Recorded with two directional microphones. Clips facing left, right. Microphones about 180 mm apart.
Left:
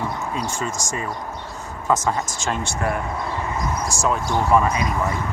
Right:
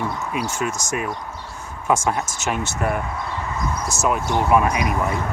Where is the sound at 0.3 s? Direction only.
10° right (ahead or behind).